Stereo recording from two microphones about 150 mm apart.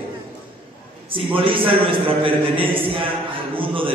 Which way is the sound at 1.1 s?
35° right (ahead or behind).